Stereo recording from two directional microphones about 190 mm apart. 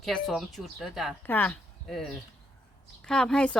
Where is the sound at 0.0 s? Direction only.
Centre (ahead or behind).